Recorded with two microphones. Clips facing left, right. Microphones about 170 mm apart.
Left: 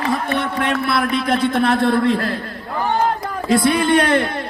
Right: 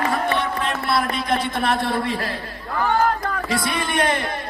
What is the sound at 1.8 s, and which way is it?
Speech, 55° left (ahead or behind).